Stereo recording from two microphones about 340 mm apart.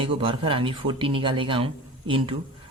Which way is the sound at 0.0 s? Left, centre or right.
Centre.